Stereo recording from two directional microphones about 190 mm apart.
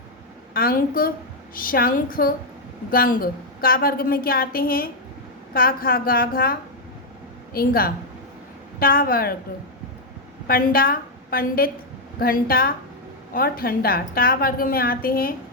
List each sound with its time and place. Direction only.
0.5 s a woman's voice: 50° left (ahead or behind)
10.4 s a woman's voice: 50° left (ahead or behind)